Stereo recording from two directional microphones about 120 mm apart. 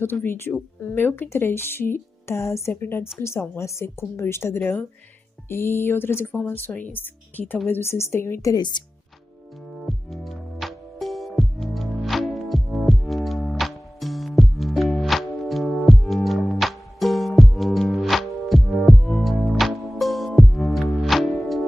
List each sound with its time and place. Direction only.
0.0 s speech: 20° left (ahead or behind)
9.8 s music: centre (ahead or behind)